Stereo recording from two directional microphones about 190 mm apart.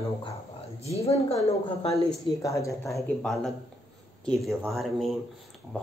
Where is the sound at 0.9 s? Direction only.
35° left (ahead or behind).